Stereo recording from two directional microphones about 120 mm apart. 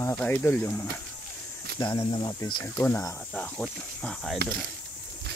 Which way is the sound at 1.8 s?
40° left (ahead or behind).